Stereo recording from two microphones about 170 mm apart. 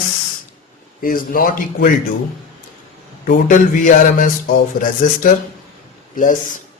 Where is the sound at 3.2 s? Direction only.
50° left (ahead or behind).